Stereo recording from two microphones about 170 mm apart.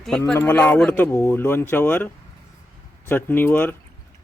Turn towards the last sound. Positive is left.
turn(degrees=10)  # may be behind; listen again after turning